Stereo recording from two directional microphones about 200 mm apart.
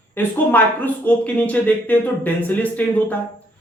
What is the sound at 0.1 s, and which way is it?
Speech, 10° left (ahead or behind).